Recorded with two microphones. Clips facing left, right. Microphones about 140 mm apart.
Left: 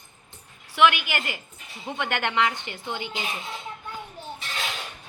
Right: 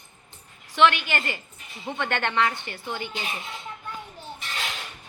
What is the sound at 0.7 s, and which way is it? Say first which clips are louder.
A woman's voice: even; 10° left (ahead or behind).